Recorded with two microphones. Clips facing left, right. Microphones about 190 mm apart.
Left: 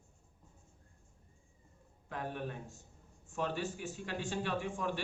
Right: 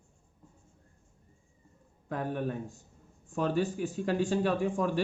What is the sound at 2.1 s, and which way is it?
A man's voice, 45° right (ahead or behind).